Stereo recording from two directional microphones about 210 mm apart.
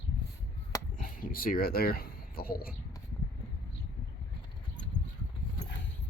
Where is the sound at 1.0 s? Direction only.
40° left (ahead or behind).